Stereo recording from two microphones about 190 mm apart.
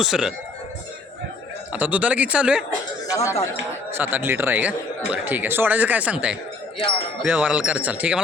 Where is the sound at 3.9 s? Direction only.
10° right (ahead or behind).